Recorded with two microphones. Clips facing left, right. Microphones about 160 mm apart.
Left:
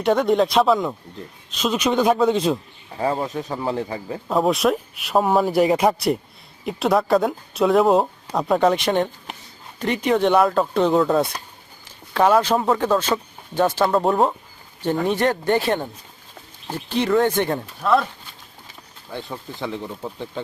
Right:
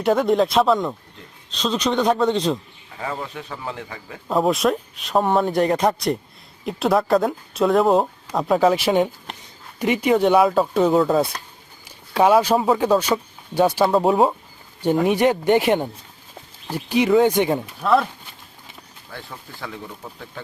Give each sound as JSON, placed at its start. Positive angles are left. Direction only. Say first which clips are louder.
{"t": 0.0, "sound": "speech", "louder": "even", "side_deg": 0}
{"t": 3.0, "sound": "speech", "louder": "left 6 dB", "side_deg": 35}
{"t": 4.3, "sound": "speech", "louder": "even", "side_deg": 0}
{"t": 17.8, "sound": "speech", "louder": "right 1 dB", "side_deg": -5}
{"t": 19.1, "sound": "speech", "louder": "left 6 dB", "side_deg": 20}